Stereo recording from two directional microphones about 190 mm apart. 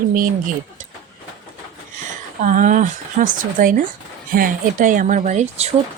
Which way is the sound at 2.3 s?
40° right (ahead or behind).